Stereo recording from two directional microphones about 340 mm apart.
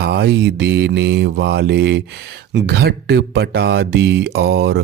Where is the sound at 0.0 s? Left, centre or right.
Right.